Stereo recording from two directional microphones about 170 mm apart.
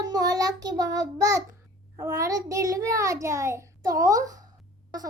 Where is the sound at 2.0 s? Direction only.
20° right (ahead or behind).